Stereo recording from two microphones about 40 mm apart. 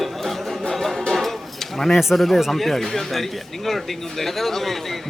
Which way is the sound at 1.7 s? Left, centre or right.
Centre.